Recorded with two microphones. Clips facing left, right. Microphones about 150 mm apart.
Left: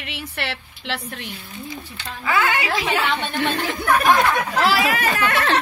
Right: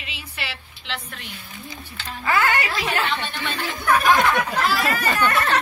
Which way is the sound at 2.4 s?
10° left (ahead or behind).